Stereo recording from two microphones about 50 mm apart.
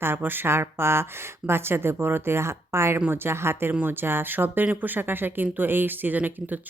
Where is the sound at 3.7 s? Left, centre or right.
Right.